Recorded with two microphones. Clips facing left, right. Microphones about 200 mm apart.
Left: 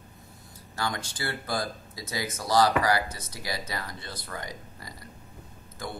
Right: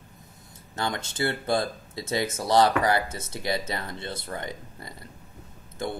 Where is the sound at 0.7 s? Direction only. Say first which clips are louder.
Right 3 dB; 25° right (ahead or behind).